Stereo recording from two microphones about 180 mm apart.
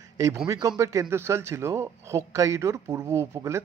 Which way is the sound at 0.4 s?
20° right (ahead or behind).